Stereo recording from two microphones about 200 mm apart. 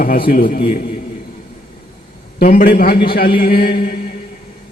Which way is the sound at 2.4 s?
45° left (ahead or behind).